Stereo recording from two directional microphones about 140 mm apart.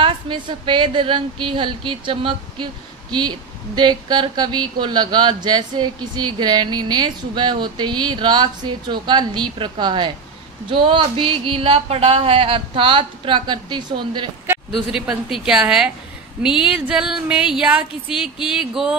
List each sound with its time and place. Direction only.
0.0 s a woman's voice: 35° right (ahead or behind)
14.9 s speech: 5° right (ahead or behind)